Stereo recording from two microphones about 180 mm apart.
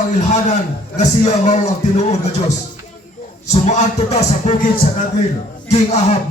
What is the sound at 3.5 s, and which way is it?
A man's voice, 40° left (ahead or behind).